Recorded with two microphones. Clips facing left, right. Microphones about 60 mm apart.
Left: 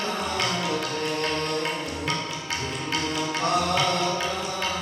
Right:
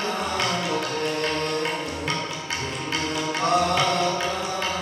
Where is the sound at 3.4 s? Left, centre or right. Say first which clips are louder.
Right 4 dB; right.